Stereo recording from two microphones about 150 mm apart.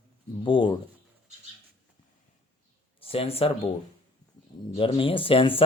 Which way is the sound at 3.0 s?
40° left (ahead or behind).